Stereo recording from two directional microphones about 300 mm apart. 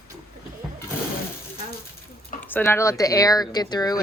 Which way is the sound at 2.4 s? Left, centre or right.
Centre.